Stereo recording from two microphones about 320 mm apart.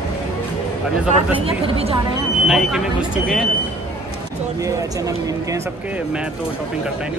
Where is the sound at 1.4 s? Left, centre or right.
Centre.